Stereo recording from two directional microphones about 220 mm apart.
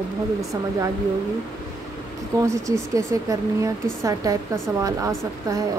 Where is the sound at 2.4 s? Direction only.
15° right (ahead or behind).